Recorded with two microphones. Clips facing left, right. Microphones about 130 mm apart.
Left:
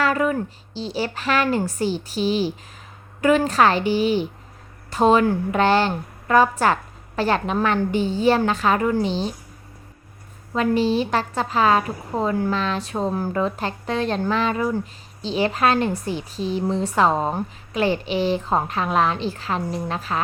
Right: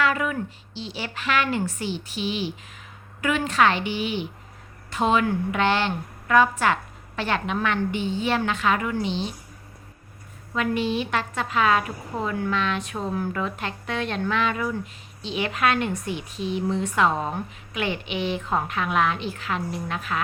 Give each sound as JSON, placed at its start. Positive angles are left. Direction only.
{"t": 0.0, "sound": "a woman's voice", "side_deg": 35}
{"t": 10.5, "sound": "a woman's voice", "side_deg": 35}